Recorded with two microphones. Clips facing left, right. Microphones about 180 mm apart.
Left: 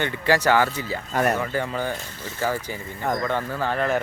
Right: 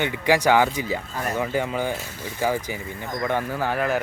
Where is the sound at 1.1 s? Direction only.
70° left (ahead or behind).